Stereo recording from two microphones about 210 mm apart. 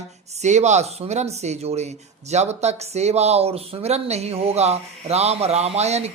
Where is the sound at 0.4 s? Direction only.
35° right (ahead or behind).